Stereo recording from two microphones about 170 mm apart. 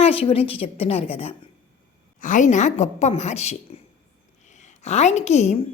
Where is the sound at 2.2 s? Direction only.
50° left (ahead or behind).